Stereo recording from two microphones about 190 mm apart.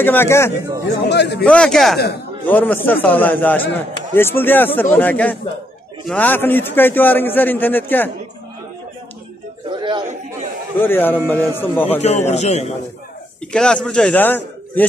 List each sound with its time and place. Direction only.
0.0 s a man's voice: 10° left (ahead or behind)
0.8 s speech: 65° left (ahead or behind)
1.4 s a man's voice: 5° left (ahead or behind)
9.7 s chatter: 25° right (ahead or behind)
10.8 s a man's voice: 10° left (ahead or behind)
12.3 s a man's voice: 35° left (ahead or behind)
13.5 s a man's voice: 5° left (ahead or behind)